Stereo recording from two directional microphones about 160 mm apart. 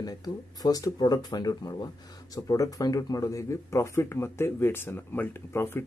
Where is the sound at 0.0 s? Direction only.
25° left (ahead or behind).